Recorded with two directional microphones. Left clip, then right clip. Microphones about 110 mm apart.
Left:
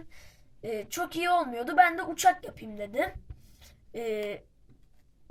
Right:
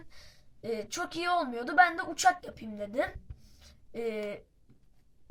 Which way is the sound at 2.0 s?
40° left (ahead or behind).